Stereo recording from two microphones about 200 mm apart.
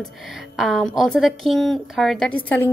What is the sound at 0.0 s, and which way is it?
A woman's voice, centre (ahead or behind).